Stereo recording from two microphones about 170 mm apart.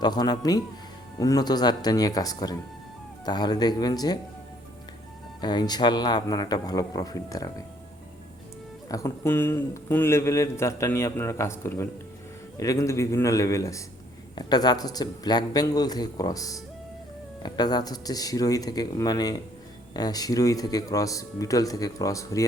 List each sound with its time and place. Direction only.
0.0 s speech: 25° left (ahead or behind)
5.4 s speech: 25° left (ahead or behind)
8.9 s a man's voice: 20° left (ahead or behind)